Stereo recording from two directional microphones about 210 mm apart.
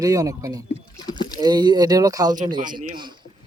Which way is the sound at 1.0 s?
20° left (ahead or behind).